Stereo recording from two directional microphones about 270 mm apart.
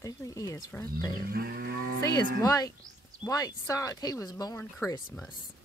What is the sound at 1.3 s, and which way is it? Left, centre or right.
Moo, right.